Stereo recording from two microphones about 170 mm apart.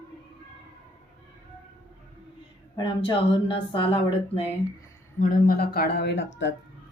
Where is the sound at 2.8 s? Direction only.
30° left (ahead or behind).